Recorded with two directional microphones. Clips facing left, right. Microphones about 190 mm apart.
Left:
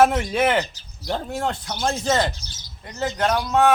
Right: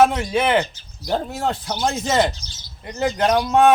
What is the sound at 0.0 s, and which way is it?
Speech, centre (ahead or behind).